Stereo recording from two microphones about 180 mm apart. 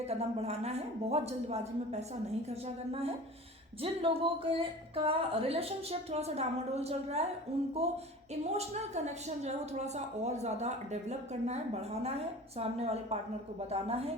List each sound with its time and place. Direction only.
0.1 s a woman's voice: 35° right (ahead or behind)